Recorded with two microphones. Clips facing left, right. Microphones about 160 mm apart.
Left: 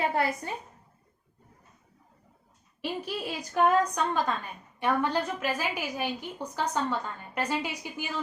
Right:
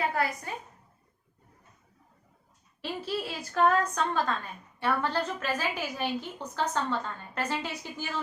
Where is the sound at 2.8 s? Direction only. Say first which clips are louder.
Even; 15° left (ahead or behind).